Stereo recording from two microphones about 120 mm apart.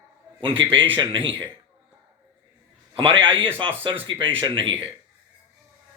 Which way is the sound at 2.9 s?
50° right (ahead or behind).